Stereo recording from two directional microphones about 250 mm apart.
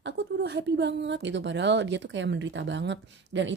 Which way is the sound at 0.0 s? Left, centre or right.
Right.